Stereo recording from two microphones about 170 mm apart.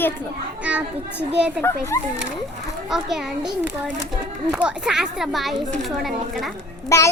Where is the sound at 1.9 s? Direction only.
15° left (ahead or behind).